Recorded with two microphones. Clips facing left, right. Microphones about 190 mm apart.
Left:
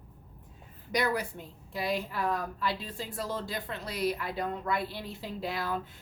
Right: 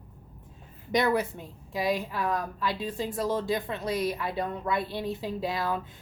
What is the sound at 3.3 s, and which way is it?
Speech, 20° right (ahead or behind).